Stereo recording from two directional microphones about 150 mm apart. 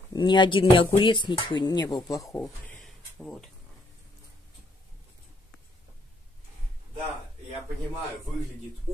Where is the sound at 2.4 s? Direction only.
5° left (ahead or behind).